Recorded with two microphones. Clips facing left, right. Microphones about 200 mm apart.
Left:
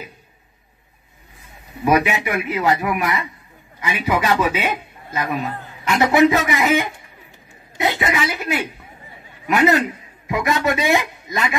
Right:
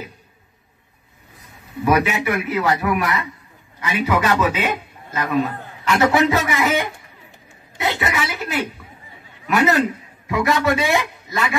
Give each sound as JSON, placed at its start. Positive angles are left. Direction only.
{"t": 1.9, "sound": "speech", "side_deg": 15}
{"t": 5.9, "sound": "a man's voice", "side_deg": 15}